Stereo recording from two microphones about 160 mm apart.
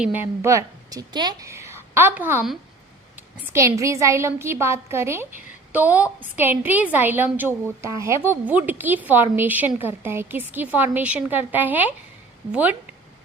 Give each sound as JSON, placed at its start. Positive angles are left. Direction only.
{"t": 0.0, "sound": "a woman's voice", "side_deg": -10}
{"t": 3.5, "sound": "a woman's voice", "side_deg": -20}